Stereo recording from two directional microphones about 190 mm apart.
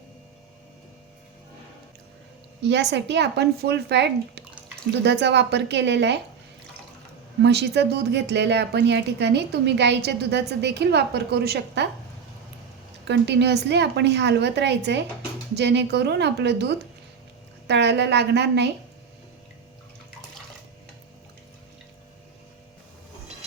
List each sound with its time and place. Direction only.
2.6 s a woman's voice: 65° right (ahead or behind)
7.4 s a woman's voice: 60° right (ahead or behind)
13.1 s a woman's voice: 60° right (ahead or behind)